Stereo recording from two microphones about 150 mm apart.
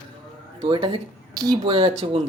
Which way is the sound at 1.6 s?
45° right (ahead or behind).